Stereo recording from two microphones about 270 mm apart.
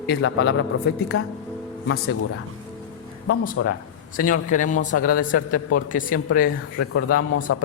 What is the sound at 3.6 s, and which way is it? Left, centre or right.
Speech, left.